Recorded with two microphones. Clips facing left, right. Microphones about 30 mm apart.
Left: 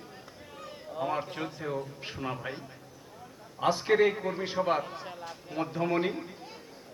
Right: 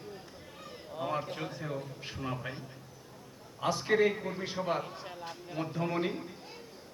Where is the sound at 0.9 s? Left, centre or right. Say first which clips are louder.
Left 3 dB; centre.